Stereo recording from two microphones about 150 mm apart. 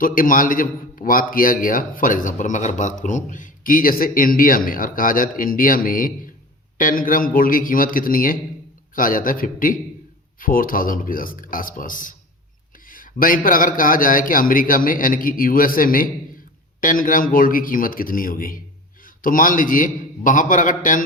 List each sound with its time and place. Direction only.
0.0 s a man's voice: 65° left (ahead or behind)